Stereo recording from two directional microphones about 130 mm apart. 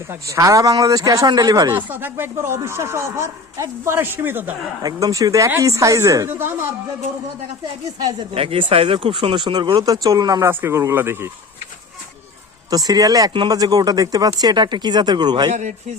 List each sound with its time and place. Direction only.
0.1 s speech: 25° right (ahead or behind)
1.7 s speech: 15° right (ahead or behind)
4.8 s speech: 30° right (ahead or behind)
7.9 s speech: 30° right (ahead or behind)
8.4 s speech: 45° right (ahead or behind); by 10.5 s 30° right (ahead or behind)
10.5 s speech: 20° right (ahead or behind)
12.7 s speech: 30° right (ahead or behind)
15.5 s a man's voice: 65° right (ahead or behind)